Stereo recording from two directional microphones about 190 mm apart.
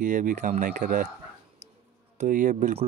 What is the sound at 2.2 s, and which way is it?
Speech, 45° right (ahead or behind).